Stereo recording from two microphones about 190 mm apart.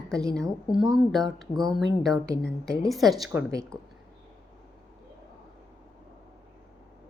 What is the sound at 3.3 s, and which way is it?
Speech, 15° right (ahead or behind).